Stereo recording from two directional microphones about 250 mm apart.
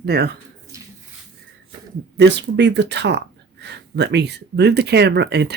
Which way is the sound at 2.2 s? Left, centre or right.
Right.